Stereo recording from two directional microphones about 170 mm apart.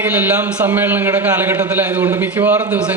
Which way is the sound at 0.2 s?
10° right (ahead or behind).